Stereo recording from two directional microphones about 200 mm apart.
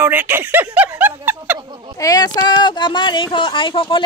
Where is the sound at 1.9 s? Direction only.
15° left (ahead or behind).